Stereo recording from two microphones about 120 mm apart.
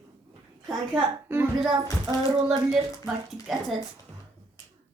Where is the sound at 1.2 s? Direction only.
20° right (ahead or behind).